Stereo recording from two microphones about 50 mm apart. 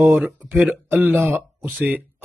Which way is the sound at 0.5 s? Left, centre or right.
Right.